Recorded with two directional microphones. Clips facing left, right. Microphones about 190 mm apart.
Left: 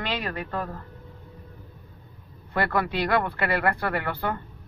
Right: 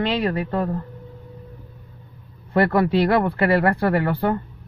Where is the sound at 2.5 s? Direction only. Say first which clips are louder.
Right 8 dB; 30° right (ahead or behind).